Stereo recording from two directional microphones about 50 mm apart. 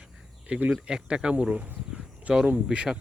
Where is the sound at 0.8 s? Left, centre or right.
Centre.